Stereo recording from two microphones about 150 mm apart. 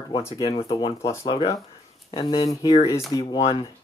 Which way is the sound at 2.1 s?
35° left (ahead or behind).